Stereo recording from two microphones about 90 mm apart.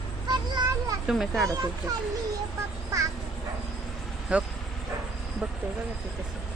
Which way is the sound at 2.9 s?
35° right (ahead or behind).